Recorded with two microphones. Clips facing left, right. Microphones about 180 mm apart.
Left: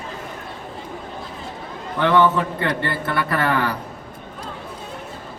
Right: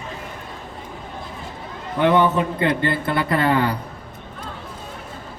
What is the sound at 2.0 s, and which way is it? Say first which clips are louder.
A man's voice: even; 20° right (ahead or behind).